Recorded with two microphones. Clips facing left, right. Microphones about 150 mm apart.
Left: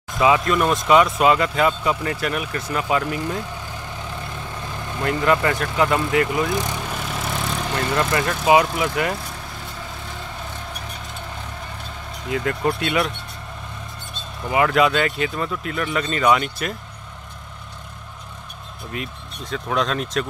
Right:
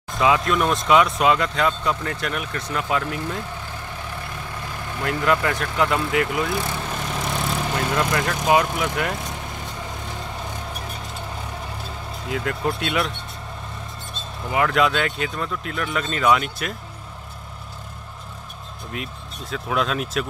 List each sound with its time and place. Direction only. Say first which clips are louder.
0.1 s speech: left 2 dB; centre (ahead or behind)
4.7 s vehicle: left 2 dB; 20° left (ahead or behind)
5.0 s speech: left 2 dB; centre (ahead or behind)
6.8 s vehicle: even; 5° left (ahead or behind)
8.1 s speech: left 4 dB; centre (ahead or behind)
12.3 s speech: left 3 dB; centre (ahead or behind)
14.1 s speech: left 3 dB; centre (ahead or behind)
18.9 s speech: left 2 dB; centre (ahead or behind)